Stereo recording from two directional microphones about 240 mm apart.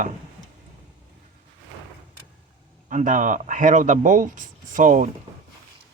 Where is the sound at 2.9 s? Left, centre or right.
Right.